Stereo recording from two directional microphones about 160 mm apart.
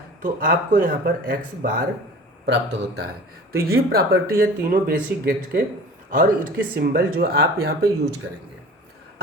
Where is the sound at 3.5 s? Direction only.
70° right (ahead or behind).